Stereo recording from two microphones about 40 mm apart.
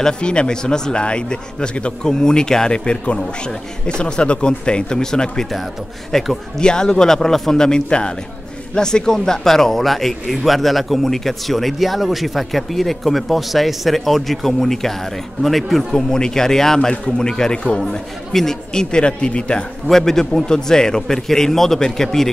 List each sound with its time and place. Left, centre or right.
0.0 s a man's voice: left
6.6 s a man's voice: left; by 16.0 s centre
16.1 s a man's voice: centre
17.7 s a man's voice: centre
18.7 s speech: left
19.9 s a man's voice: centre